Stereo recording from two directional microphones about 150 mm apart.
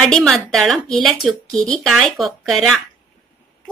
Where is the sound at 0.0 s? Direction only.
5° left (ahead or behind).